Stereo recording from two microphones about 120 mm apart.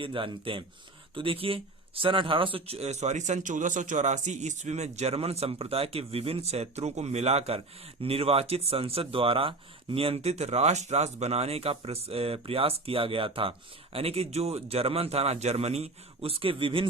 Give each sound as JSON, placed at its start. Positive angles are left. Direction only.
{"t": 0.0, "sound": "speech", "side_deg": -45}